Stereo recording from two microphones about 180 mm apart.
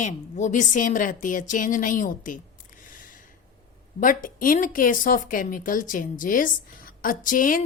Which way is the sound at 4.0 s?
50° left (ahead or behind).